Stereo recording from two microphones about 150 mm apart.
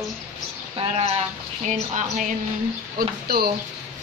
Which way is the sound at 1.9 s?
60° right (ahead or behind).